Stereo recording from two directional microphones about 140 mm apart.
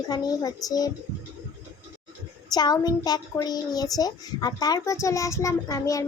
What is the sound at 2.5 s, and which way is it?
A child's voice, 30° left (ahead or behind).